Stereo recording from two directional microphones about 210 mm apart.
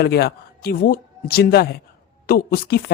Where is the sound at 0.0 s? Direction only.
50° left (ahead or behind).